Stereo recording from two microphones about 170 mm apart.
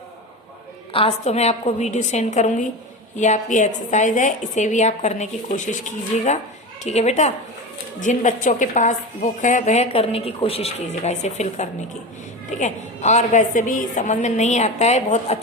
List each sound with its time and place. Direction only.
0.9 s a woman's voice: 40° left (ahead or behind)